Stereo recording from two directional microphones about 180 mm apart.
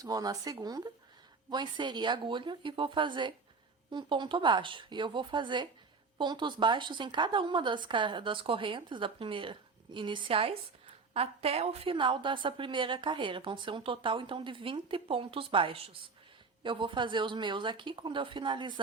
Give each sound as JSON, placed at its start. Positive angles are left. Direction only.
{"t": 0.0, "sound": "a woman's voice", "side_deg": -20}